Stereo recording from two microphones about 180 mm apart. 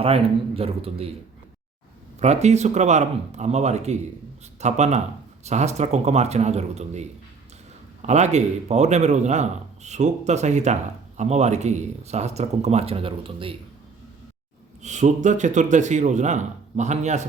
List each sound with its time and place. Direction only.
0.0 s a man's voice: 30° right (ahead or behind)
2.1 s a man's voice: 40° right (ahead or behind)
14.8 s a man's voice: 40° right (ahead or behind)